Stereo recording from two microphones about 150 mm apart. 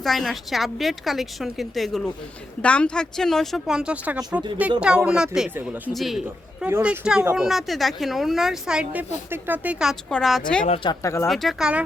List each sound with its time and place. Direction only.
0.0 s speech: centre (ahead or behind)
5.9 s a man's voice: centre (ahead or behind)
6.7 s speech: 15° right (ahead or behind); by 10.4 s centre (ahead or behind)
10.8 s speech: 20° left (ahead or behind)
11.3 s speech: centre (ahead or behind)